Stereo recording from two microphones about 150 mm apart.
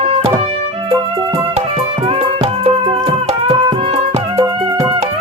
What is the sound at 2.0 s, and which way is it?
Music, 45° right (ahead or behind).